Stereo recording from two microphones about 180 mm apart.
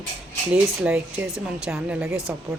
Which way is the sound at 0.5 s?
5° right (ahead or behind).